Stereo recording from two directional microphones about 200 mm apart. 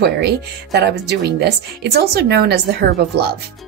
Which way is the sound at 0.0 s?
55° right (ahead or behind).